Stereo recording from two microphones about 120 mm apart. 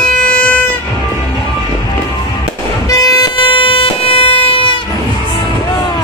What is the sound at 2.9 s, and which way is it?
Music, 30° left (ahead or behind).